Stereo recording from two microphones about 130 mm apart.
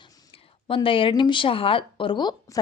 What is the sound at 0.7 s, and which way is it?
Speech, 40° left (ahead or behind).